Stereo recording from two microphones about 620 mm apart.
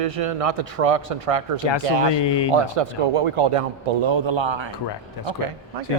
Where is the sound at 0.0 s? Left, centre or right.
Right.